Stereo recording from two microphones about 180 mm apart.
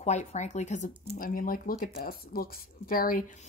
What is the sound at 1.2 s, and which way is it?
Speech, 50° left (ahead or behind).